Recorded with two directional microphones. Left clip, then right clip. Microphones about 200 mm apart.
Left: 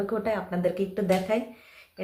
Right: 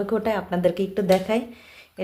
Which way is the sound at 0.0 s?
35° right (ahead or behind).